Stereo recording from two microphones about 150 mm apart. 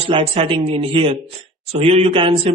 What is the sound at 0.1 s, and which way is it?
Speech, 35° right (ahead or behind).